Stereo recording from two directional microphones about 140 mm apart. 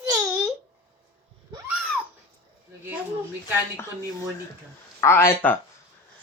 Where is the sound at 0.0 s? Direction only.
20° right (ahead or behind).